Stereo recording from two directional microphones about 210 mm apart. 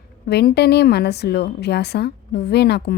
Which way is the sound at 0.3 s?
50° left (ahead or behind).